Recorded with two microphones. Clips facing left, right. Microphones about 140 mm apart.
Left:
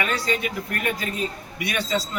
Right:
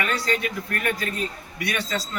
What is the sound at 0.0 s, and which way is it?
A man's voice, 15° left (ahead or behind).